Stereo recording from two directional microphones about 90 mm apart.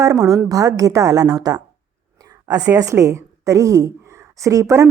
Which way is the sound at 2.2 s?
45° right (ahead or behind).